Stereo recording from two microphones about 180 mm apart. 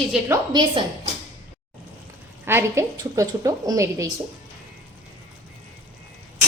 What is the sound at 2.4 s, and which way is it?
A woman's voice, 15° right (ahead or behind).